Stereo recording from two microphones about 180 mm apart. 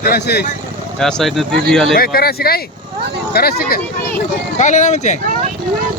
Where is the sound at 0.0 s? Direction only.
60° left (ahead or behind).